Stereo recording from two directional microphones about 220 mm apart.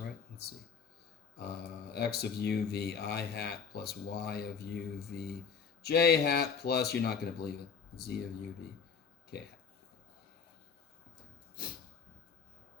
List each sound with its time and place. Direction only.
0.4 s speech: 45° left (ahead or behind)
1.9 s speech: 45° left (ahead or behind)